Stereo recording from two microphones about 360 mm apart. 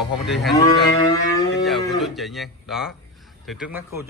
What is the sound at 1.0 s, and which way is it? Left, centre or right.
Music, centre.